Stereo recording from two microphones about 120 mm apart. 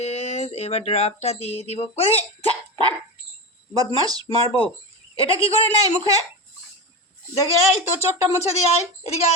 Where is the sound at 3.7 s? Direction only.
30° right (ahead or behind).